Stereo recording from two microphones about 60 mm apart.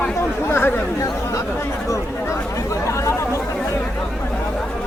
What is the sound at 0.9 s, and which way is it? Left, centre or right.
Chatter, left.